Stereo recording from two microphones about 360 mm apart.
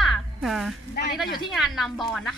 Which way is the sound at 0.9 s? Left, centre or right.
Left.